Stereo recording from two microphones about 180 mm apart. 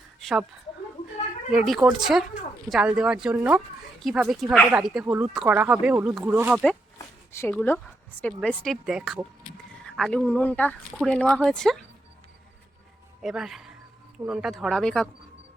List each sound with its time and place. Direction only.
0.2 s speech: centre (ahead or behind)
1.5 s speech: centre (ahead or behind)
7.3 s speech: 10° left (ahead or behind)
13.2 s speech: centre (ahead or behind)